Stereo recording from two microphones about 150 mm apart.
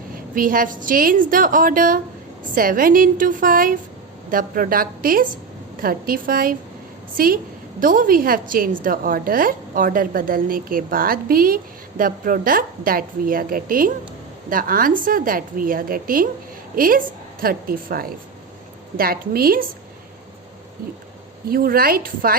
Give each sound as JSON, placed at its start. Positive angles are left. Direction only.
{"t": 0.3, "sound": "a woman's voice", "side_deg": -65}
{"t": 21.5, "sound": "a woman's voice", "side_deg": -80}